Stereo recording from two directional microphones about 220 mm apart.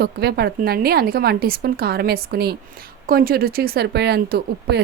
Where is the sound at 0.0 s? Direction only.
45° right (ahead or behind).